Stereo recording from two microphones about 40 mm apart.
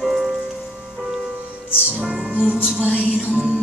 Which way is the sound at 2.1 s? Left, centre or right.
Right.